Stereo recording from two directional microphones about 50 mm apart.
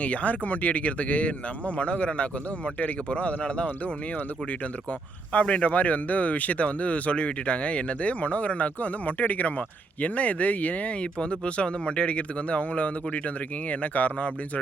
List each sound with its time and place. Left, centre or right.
0.0 s speech: left